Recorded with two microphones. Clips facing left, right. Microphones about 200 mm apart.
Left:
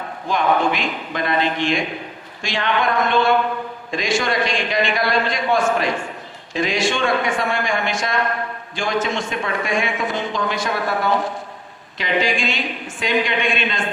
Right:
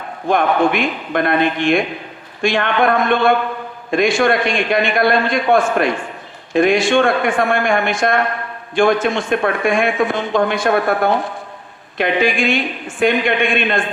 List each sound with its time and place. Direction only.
0.3 s speech: 55° right (ahead or behind)